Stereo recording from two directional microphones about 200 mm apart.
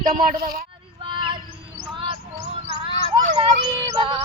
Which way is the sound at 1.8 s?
25° right (ahead or behind).